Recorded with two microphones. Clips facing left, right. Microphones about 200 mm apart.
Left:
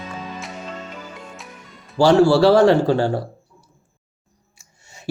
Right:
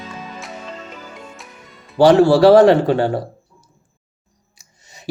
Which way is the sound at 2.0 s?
20° right (ahead or behind).